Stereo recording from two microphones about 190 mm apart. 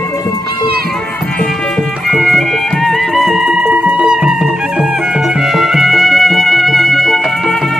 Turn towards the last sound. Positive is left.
turn(degrees=0)  # may be behind; listen again after turning